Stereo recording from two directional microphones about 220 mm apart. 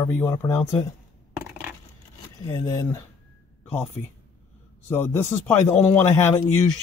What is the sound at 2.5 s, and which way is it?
Speech, 15° left (ahead or behind).